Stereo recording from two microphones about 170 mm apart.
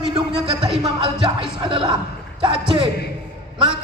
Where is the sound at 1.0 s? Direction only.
30° right (ahead or behind).